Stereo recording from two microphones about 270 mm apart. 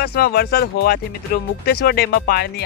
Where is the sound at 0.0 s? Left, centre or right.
Left.